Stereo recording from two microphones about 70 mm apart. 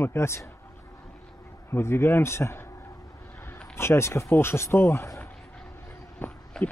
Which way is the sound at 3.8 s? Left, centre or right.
Left.